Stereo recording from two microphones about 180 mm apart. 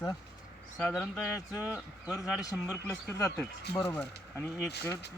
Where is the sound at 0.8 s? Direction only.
Centre (ahead or behind).